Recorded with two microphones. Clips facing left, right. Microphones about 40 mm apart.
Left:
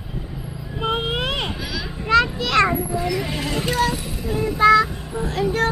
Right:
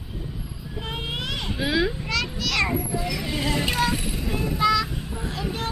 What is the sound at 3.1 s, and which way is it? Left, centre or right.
Vehicle, left.